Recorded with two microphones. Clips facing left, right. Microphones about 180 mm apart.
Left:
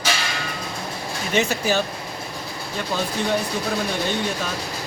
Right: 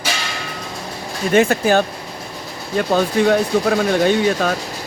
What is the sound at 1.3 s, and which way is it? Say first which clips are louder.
Speech: right 7 dB; 55° right (ahead or behind).